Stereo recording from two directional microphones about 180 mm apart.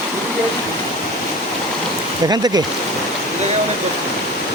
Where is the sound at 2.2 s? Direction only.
20° right (ahead or behind).